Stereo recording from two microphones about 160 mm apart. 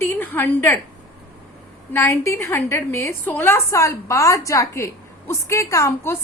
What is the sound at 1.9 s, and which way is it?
A woman's voice, 15° left (ahead or behind).